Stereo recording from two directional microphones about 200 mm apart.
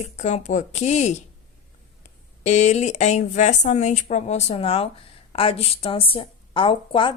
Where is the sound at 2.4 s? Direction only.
35° left (ahead or behind).